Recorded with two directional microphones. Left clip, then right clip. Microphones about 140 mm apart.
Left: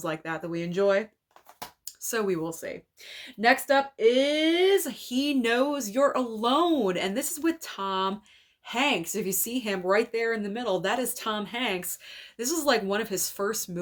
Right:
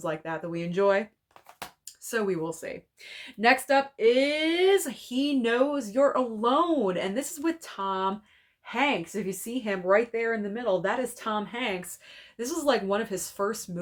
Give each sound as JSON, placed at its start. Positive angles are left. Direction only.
{"t": 0.0, "sound": "a woman's voice", "side_deg": 25}
{"t": 2.0, "sound": "a woman's voice", "side_deg": 25}